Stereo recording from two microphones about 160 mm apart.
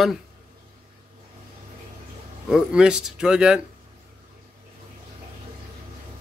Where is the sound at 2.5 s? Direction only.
5° right (ahead or behind).